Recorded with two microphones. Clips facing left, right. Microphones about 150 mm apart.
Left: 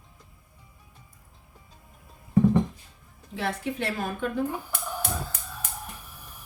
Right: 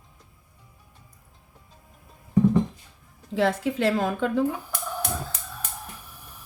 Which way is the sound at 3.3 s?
90° right.